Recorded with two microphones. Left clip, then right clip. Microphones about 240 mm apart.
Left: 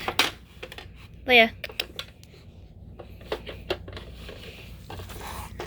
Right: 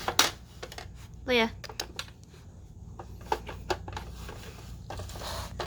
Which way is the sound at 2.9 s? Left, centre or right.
Centre.